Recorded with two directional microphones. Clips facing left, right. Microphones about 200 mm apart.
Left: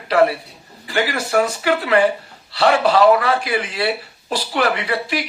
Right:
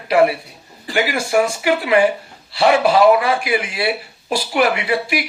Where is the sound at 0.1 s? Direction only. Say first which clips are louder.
Right 1 dB; 10° right (ahead or behind).